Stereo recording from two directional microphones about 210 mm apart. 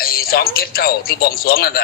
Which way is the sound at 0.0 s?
45° left (ahead or behind).